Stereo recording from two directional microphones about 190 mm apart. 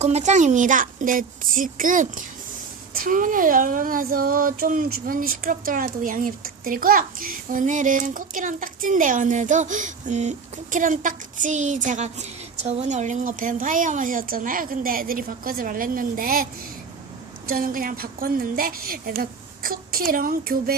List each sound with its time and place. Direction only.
0.0 s speech: 35° right (ahead or behind)